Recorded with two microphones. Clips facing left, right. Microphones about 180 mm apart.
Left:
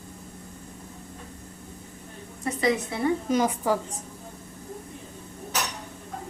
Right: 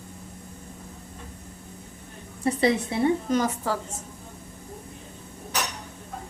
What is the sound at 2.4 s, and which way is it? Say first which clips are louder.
Speech: right 3 dB; 30° right (ahead or behind).